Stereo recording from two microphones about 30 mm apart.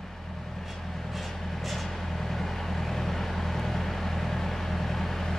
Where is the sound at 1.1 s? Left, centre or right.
Centre.